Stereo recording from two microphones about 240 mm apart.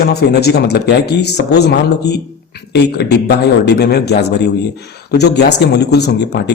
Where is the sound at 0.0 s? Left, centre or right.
Left.